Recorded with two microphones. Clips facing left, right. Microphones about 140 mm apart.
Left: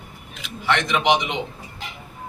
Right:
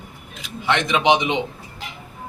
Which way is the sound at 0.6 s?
15° right (ahead or behind).